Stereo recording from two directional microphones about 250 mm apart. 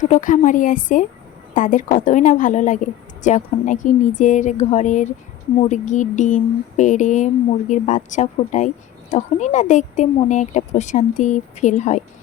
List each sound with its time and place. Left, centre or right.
0.0 s a woman's voice: left